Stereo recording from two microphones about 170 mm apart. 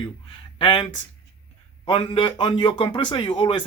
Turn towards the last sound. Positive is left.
turn(degrees=30)  # may be behind; listen again after turning